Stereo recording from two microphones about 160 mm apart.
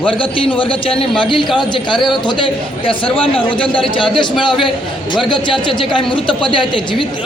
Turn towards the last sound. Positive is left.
turn(degrees=30)  # may be behind; listen again after turning